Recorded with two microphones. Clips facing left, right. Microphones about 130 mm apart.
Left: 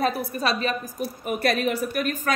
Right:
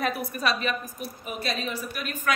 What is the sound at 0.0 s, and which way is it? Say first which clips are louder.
A woman's voice: left 3 dB; 35° left (ahead or behind).